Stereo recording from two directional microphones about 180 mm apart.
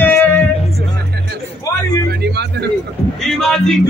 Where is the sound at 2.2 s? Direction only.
70° right (ahead or behind).